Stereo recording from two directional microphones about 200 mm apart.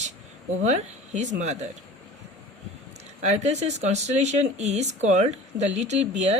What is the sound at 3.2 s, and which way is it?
Speech, 35° right (ahead or behind).